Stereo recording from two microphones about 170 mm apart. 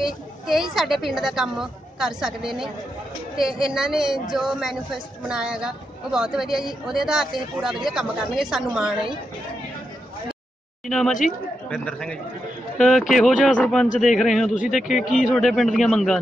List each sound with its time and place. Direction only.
0.0 s a woman's voice: centre (ahead or behind)
10.9 s a woman's voice: centre (ahead or behind)